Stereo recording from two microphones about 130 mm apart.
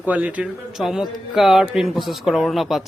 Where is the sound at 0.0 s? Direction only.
10° right (ahead or behind).